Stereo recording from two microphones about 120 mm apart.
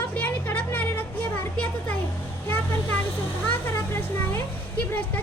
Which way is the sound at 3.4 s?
15° left (ahead or behind).